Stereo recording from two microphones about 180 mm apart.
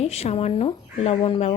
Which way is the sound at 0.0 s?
35° left (ahead or behind).